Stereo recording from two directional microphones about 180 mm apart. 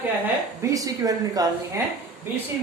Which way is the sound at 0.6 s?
20° right (ahead or behind).